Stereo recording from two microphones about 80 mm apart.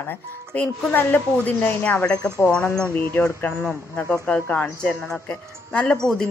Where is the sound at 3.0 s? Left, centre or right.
Left; by 6.0 s centre.